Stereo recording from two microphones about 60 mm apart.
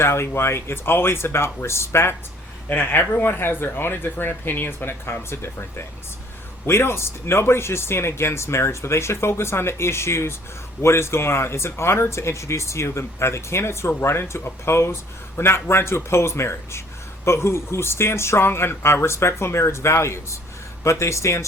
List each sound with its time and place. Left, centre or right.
0.0 s speech: left
2.6 s speech: left